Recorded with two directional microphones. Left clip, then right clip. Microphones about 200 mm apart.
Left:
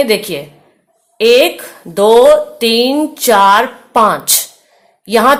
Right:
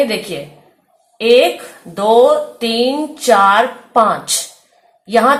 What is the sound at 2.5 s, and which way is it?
A woman's voice, 55° left (ahead or behind).